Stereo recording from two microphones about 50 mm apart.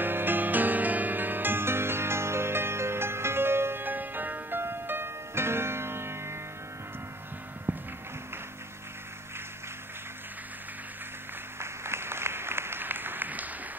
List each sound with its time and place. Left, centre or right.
0.0 s music: right
7.7 s music: right
11.6 s applause: right